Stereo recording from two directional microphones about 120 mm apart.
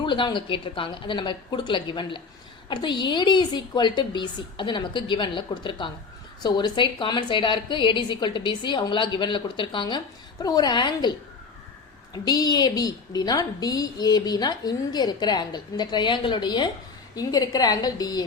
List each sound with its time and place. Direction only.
0.0 s a woman's voice: 40° left (ahead or behind)
12.1 s a woman's voice: 35° left (ahead or behind)